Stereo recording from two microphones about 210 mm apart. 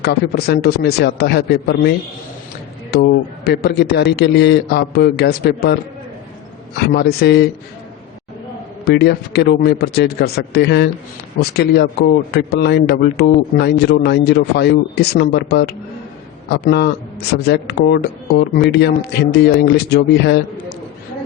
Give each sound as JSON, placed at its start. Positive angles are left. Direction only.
{"t": 0.0, "sound": "speech", "side_deg": 50}
{"t": 2.9, "sound": "speech", "side_deg": 50}
{"t": 6.7, "sound": "speech", "side_deg": 50}
{"t": 8.8, "sound": "speech", "side_deg": 50}